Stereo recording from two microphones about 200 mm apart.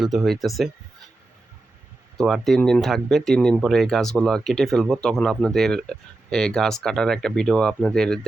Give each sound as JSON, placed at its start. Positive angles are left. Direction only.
{"t": 0.0, "sound": "speech", "side_deg": 0}
{"t": 2.1, "sound": "speech", "side_deg": 0}